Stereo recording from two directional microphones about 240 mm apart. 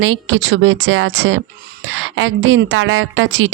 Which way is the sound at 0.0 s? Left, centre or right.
Right.